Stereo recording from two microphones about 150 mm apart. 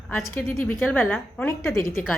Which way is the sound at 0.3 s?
15° left (ahead or behind).